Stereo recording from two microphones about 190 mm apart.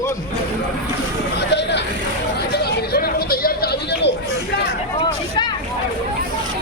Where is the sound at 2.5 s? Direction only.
55° left (ahead or behind).